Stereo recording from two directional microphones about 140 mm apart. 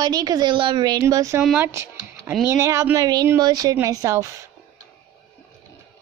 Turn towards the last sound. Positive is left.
turn(degrees=-25)  # may be behind; listen again after turning